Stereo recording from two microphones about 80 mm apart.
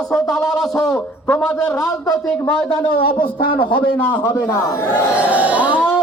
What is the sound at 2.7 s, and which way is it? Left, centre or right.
A man's voice, left.